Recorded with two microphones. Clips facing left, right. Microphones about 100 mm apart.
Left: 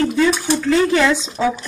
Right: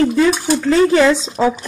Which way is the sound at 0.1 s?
35° right (ahead or behind).